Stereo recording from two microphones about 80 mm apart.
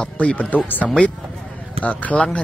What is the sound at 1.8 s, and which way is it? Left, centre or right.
Speech, centre.